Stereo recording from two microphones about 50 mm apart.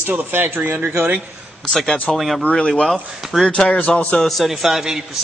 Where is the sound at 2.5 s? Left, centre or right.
Left.